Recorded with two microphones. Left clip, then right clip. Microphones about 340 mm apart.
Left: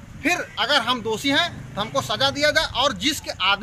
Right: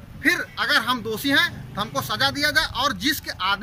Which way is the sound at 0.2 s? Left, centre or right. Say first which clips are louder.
Right 1 dB; centre.